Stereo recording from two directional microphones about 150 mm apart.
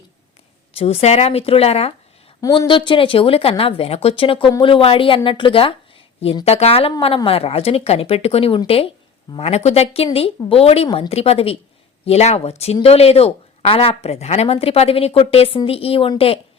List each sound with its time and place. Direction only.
0.8 s a woman's voice: 40° left (ahead or behind)
2.4 s speech: 30° left (ahead or behind)